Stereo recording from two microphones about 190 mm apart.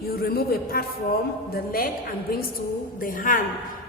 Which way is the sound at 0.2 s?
55° left (ahead or behind).